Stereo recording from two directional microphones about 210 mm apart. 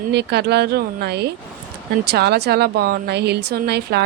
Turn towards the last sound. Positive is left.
turn(degrees=-50)  # may be behind; listen again after turning